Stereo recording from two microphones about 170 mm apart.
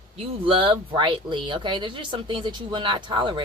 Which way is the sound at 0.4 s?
30° right (ahead or behind).